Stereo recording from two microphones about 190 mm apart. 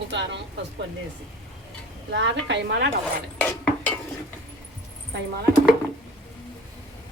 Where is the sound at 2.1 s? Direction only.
70° right (ahead or behind).